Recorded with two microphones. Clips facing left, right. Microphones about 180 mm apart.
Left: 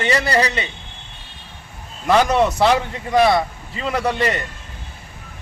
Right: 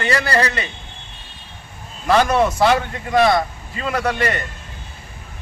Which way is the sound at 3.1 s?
5° left (ahead or behind).